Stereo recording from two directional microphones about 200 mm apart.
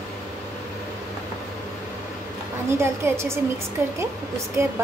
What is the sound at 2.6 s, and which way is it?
A child's voice, 15° right (ahead or behind).